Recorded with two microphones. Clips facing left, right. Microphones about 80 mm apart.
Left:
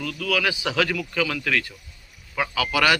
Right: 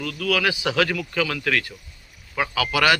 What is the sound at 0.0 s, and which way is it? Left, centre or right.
Speech, right.